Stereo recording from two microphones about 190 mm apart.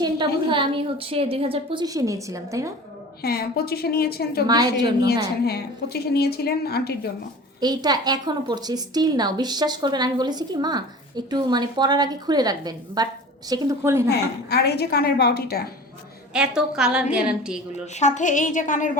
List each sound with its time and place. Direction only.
0.0 s a woman's voice: 25° right (ahead or behind)
3.2 s a woman's voice: 55° left (ahead or behind)
4.4 s a woman's voice: 20° right (ahead or behind)
5.5 s a woman's voice: 55° left (ahead or behind)
7.6 s a woman's voice: 20° right (ahead or behind)
14.1 s a woman's voice: 60° left (ahead or behind)
16.3 s a woman's voice: 5° right (ahead or behind)
18.0 s a woman's voice: 40° left (ahead or behind)